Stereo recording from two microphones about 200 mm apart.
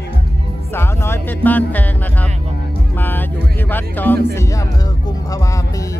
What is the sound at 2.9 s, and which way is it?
Speech, 10° left (ahead or behind).